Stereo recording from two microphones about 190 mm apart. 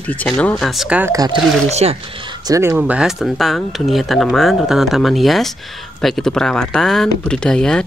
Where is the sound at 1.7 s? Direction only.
35° right (ahead or behind).